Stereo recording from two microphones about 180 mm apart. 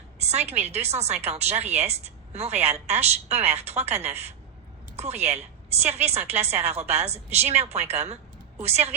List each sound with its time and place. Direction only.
0.2 s a woman's voice: 35° right (ahead or behind)